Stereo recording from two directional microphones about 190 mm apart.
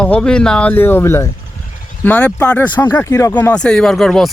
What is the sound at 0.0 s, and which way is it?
A man's voice, 5° left (ahead or behind).